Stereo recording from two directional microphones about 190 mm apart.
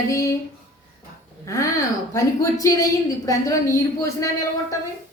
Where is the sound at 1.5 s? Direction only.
15° left (ahead or behind).